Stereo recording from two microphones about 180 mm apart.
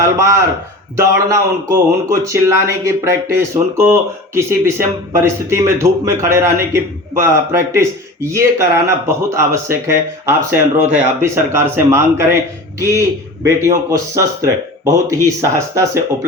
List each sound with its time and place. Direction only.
0.9 s speech: 15° right (ahead or behind)